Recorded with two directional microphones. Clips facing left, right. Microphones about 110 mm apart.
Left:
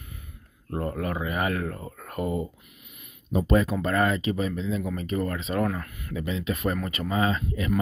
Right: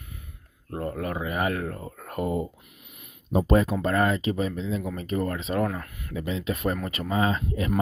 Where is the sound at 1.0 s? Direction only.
20° right (ahead or behind).